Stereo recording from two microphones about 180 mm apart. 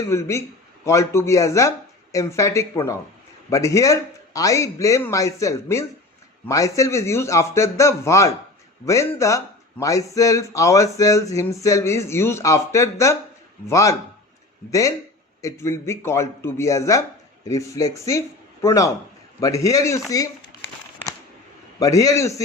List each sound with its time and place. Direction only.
0.1 s a man's voice: 15° left (ahead or behind)
21.8 s a man's voice: 20° left (ahead or behind)